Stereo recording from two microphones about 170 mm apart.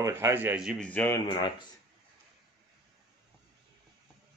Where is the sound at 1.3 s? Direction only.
25° left (ahead or behind).